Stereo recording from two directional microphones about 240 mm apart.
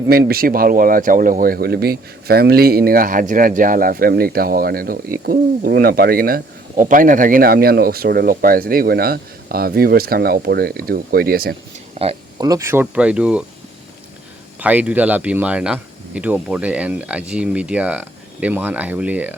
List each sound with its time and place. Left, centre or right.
0.1 s speech: right
11.9 s speech: right; by 13.4 s centre
14.6 s speech: centre